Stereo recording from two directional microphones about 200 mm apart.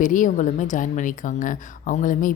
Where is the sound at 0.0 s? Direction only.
40° left (ahead or behind).